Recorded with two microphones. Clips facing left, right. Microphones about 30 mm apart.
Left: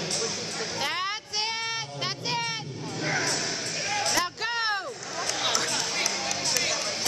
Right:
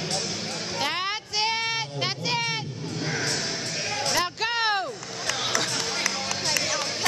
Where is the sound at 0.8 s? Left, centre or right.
Right.